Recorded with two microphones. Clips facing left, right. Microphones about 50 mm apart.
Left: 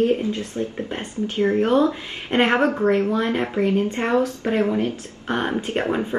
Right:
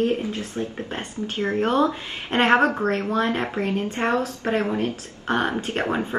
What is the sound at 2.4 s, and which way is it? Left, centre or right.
Speech, right.